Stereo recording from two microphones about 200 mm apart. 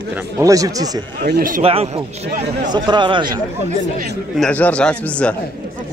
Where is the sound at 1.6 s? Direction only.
30° right (ahead or behind).